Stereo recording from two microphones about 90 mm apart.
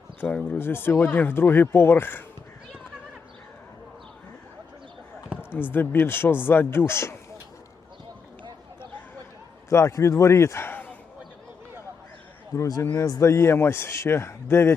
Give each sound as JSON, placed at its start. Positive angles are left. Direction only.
{"t": 0.2, "sound": "speech", "side_deg": 20}
{"t": 5.3, "sound": "basketball bounce", "side_deg": -15}
{"t": 5.5, "sound": "speech", "side_deg": 25}
{"t": 9.6, "sound": "a man's voice", "side_deg": 35}
{"t": 12.5, "sound": "speech", "side_deg": 40}